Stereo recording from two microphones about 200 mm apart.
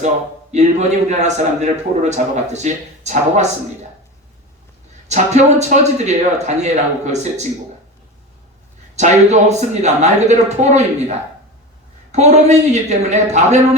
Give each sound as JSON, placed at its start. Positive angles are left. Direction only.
{"t": 0.5, "sound": "a man's voice", "side_deg": -35}
{"t": 5.0, "sound": "a man's voice", "side_deg": -35}
{"t": 9.0, "sound": "a man's voice", "side_deg": -35}